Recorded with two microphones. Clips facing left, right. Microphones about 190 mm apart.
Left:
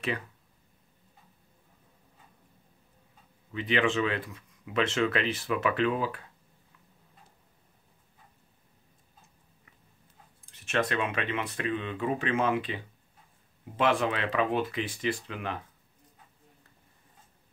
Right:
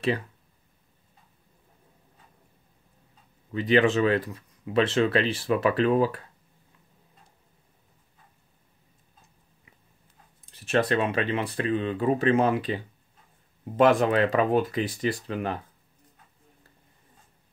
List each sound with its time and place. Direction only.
3.5 s speech: 40° right (ahead or behind)
10.5 s speech: 35° right (ahead or behind)